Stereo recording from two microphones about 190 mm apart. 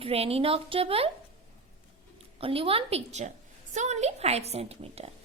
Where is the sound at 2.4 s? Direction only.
30° right (ahead or behind).